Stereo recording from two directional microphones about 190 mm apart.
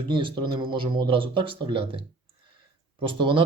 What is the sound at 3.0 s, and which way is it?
Speech, 25° right (ahead or behind).